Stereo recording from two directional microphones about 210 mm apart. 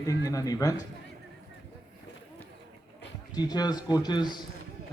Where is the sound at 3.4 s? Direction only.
20° left (ahead or behind).